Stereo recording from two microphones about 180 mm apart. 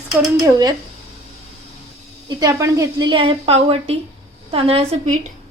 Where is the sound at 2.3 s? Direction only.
20° right (ahead or behind).